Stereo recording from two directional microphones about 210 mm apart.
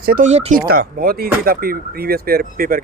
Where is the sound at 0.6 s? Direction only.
45° right (ahead or behind).